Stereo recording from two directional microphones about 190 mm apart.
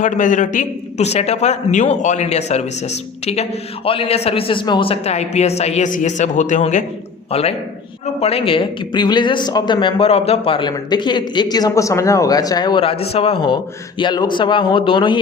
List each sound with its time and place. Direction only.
0.0 s a man's voice: 40° left (ahead or behind); by 15.2 s 25° left (ahead or behind)